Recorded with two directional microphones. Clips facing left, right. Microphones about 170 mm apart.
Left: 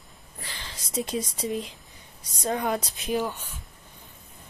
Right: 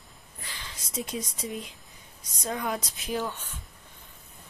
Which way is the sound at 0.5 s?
30° left (ahead or behind).